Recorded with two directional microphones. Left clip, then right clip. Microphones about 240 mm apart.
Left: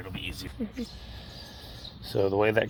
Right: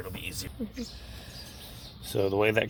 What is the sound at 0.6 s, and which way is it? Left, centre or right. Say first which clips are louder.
Speech: left 4 dB; centre.